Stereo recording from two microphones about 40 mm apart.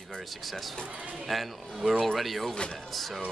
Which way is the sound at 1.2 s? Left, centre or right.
Centre.